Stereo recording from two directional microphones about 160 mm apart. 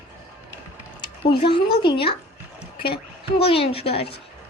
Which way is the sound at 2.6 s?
35° left (ahead or behind).